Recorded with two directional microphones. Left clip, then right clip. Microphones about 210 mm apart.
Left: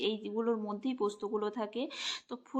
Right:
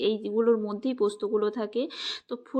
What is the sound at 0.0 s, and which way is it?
Speech, 20° right (ahead or behind).